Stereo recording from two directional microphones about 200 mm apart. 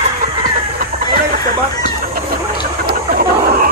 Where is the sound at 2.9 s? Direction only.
45° right (ahead or behind).